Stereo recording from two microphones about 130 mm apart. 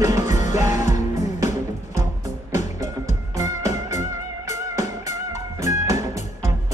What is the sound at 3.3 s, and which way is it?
Music, 25° right (ahead or behind).